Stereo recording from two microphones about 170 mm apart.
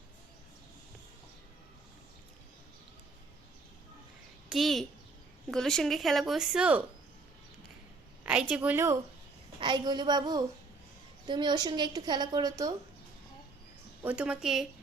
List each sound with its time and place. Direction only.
4.4 s a child's voice: centre (ahead or behind)
8.2 s a woman's voice: 5° right (ahead or behind)
9.6 s a woman's voice: 25° right (ahead or behind)
14.0 s a woman's voice: 10° right (ahead or behind)